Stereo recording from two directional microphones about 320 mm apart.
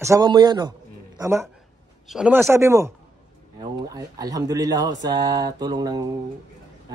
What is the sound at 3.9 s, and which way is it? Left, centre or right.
Speech, centre.